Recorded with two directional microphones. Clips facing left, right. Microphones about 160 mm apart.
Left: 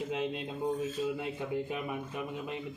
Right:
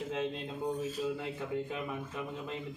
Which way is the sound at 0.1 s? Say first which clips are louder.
Left 1 dB; 10° left (ahead or behind).